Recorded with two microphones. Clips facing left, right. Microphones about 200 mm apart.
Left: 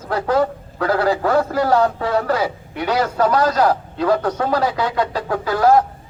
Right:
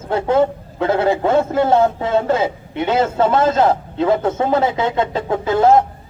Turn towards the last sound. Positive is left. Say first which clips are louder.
# right 2 dB
turn(degrees=-25)  # may be behind; listen again after turning